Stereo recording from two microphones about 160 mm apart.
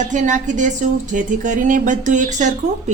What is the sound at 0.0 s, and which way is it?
Speech, 50° right (ahead or behind).